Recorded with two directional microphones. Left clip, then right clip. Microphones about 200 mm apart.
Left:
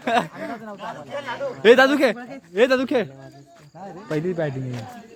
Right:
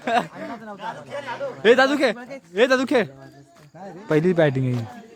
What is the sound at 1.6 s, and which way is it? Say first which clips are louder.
A man's voice: left 2 dB; 10° left (ahead or behind).